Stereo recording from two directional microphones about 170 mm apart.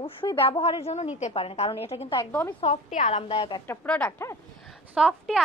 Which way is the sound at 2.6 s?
40° left (ahead or behind).